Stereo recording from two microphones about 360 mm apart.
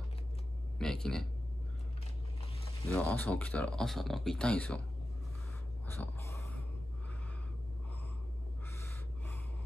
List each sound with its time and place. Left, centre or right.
0.7 s speech: centre
2.9 s speech: centre
5.9 s snort: centre